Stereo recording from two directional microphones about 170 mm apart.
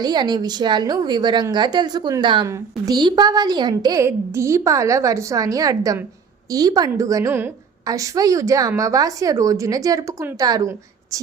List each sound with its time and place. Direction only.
0.0 s a woman's voice: 25° right (ahead or behind)